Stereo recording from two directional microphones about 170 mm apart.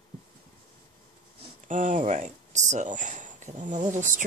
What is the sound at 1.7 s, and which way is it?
Speech, 50° right (ahead or behind).